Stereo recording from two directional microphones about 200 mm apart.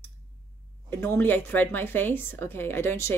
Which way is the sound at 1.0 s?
10° left (ahead or behind).